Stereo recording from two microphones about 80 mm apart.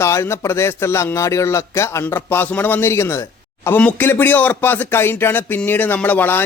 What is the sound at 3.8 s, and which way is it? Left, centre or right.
A man's voice, left.